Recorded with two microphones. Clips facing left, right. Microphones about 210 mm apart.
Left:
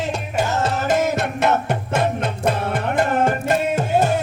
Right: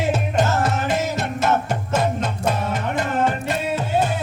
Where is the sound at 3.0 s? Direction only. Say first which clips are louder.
Left 3 dB; 50° left (ahead or behind).